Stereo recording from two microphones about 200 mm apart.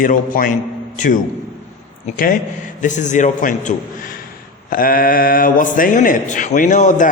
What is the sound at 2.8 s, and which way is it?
A man's voice, 40° left (ahead or behind).